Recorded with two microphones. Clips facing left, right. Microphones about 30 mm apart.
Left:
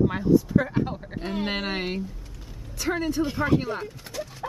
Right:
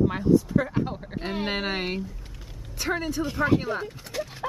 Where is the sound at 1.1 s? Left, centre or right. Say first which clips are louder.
Even; centre.